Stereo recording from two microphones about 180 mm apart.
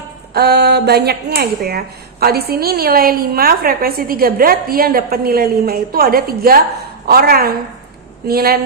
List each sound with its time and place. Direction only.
0.3 s speech: 65° right (ahead or behind)